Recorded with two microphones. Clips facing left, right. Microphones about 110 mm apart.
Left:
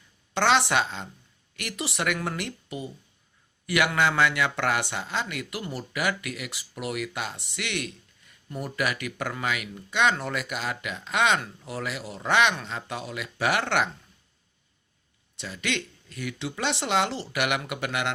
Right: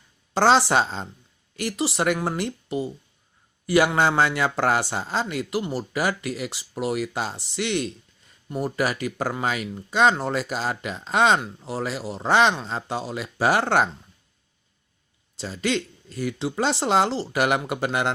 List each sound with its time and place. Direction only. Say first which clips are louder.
0.3 s speech: right 4 dB; 35° right (ahead or behind)
15.4 s speech: right 6 dB; 35° right (ahead or behind)